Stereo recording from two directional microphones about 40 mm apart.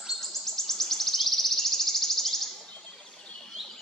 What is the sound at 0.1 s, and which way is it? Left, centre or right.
Bird vocalization, centre.